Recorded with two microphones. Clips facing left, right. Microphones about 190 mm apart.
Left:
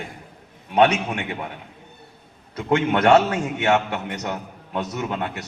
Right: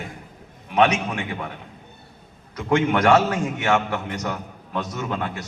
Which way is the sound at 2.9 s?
25° left (ahead or behind).